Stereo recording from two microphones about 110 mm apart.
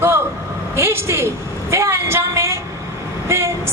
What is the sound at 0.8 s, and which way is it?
Speech, 25° right (ahead or behind).